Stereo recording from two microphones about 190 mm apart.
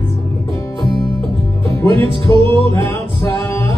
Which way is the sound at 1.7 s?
30° right (ahead or behind).